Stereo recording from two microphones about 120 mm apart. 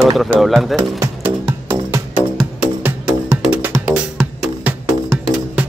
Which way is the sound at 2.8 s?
15° right (ahead or behind).